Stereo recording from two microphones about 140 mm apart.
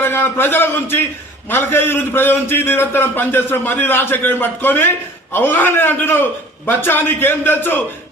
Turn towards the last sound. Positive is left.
turn(degrees=15)  # may be behind; listen again after turning